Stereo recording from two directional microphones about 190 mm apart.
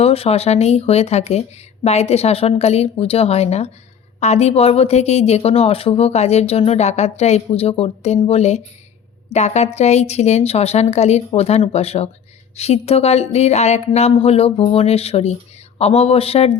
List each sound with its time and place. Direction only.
0.0 s speech: 30° left (ahead or behind)